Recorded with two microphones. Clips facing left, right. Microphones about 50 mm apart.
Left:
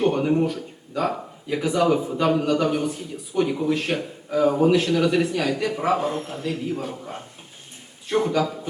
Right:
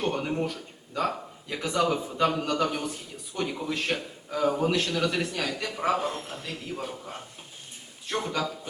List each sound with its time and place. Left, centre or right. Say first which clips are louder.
0.0 s speech: left 8 dB; centre